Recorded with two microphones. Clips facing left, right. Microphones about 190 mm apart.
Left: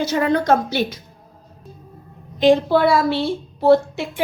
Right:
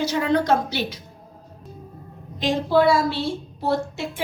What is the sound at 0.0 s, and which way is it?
Speech, 50° left (ahead or behind).